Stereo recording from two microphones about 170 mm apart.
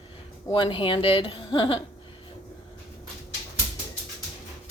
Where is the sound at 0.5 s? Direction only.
30° left (ahead or behind).